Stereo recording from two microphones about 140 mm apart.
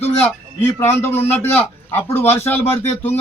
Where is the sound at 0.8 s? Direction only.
15° left (ahead or behind).